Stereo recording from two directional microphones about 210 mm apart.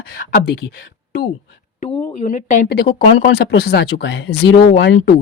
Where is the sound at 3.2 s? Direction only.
55° left (ahead or behind).